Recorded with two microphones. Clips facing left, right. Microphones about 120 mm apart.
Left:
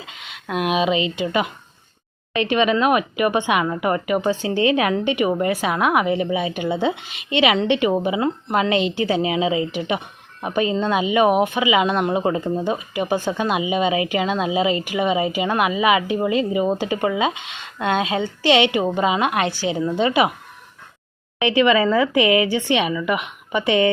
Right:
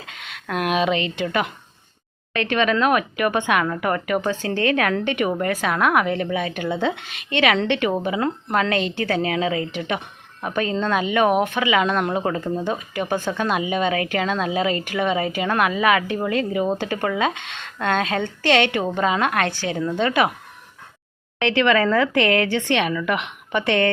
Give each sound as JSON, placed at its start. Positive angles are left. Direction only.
{"t": 0.0, "sound": "a sound", "side_deg": 0}
{"t": 1.2, "sound": "speech", "side_deg": 5}
{"t": 6.9, "sound": "speech", "side_deg": -55}
{"t": 7.3, "sound": "speech", "side_deg": 10}
{"t": 21.3, "sound": "speech", "side_deg": 10}